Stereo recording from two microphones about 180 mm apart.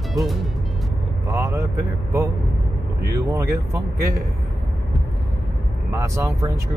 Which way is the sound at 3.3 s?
15° right (ahead or behind).